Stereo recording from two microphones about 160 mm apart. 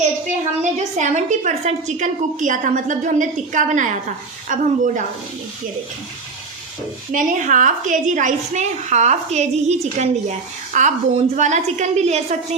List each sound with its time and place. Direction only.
0.3 s a woman's voice: 50° right (ahead or behind)
7.1 s a woman's voice: 55° right (ahead or behind)